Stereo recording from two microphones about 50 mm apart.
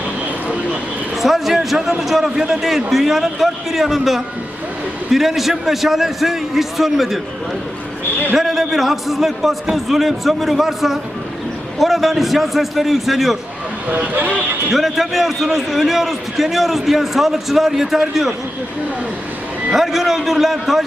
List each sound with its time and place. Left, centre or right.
1.1 s a man's voice: centre
8.4 s a man's voice: centre
13.9 s speech: right
14.7 s a man's voice: centre
19.7 s a man's voice: centre